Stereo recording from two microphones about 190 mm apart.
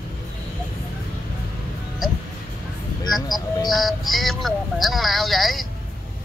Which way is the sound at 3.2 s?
20° left (ahead or behind).